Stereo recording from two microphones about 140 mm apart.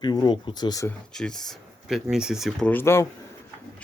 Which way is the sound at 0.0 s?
30° left (ahead or behind).